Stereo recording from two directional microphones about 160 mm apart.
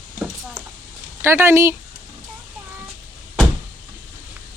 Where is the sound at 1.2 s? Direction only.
15° right (ahead or behind).